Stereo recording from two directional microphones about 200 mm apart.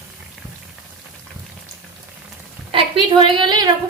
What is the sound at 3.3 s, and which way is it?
Speech, 25° right (ahead or behind).